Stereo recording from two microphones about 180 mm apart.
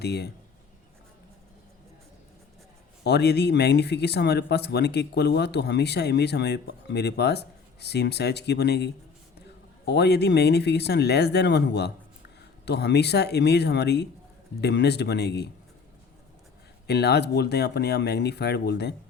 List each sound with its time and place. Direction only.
0.0 s speech: 65° left (ahead or behind)
3.0 s speech: 65° left (ahead or behind)
16.8 s speech: 65° left (ahead or behind)